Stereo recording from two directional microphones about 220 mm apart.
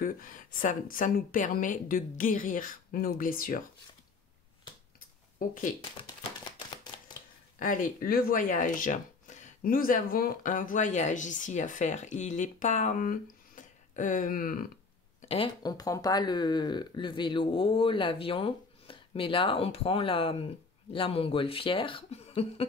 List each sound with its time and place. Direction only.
0.0 s speech: 40° left (ahead or behind)
5.4 s speech: 35° left (ahead or behind)
7.5 s speech: 40° left (ahead or behind)
15.2 s speech: 25° left (ahead or behind)